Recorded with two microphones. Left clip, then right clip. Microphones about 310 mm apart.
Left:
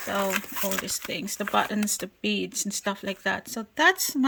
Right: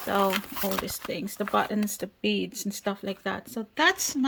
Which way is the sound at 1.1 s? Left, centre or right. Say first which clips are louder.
Even; centre.